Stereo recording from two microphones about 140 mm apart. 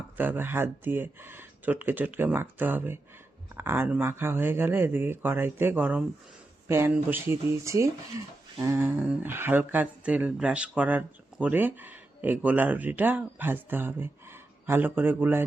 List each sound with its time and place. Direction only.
0.2 s speech: 15° right (ahead or behind)